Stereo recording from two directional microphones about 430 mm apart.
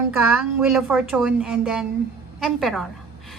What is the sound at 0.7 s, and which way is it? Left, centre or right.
A woman's voice, centre.